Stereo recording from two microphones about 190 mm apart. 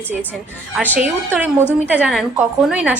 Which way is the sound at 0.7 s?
10° right (ahead or behind).